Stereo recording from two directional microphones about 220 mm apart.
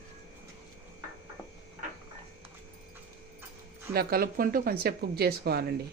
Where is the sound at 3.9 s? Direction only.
45° right (ahead or behind).